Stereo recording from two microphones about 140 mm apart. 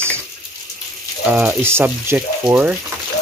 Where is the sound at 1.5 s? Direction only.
15° right (ahead or behind).